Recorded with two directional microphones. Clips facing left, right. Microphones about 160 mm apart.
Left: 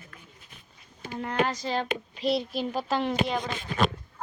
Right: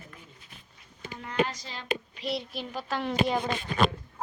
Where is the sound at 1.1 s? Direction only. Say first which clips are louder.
Left 2 dB; 55° left (ahead or behind).